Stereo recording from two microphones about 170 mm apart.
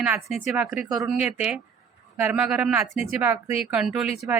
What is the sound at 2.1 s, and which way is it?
Speech, 10° right (ahead or behind).